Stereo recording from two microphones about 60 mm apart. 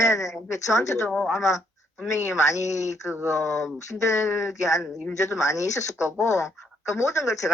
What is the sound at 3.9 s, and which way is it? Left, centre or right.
Speech, left.